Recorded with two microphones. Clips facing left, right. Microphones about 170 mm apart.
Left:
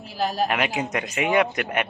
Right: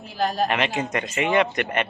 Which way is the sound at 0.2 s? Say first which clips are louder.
Right 1 dB; 5° left (ahead or behind).